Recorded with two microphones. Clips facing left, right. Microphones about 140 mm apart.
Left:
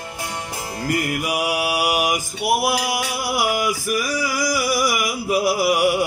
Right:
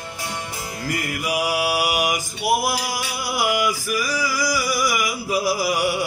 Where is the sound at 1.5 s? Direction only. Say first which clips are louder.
Left 1 dB; 50° left (ahead or behind).